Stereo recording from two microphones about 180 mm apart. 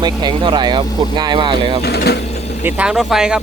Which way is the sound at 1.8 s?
65° left (ahead or behind).